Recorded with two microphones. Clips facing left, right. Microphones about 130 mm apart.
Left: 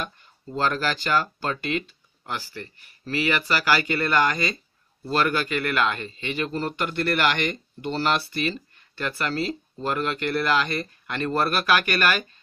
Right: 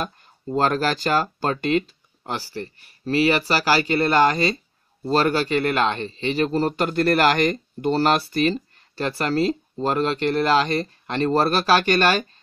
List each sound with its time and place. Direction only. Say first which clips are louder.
0.0 s a man's voice: right 5 dB; 40° right (ahead or behind)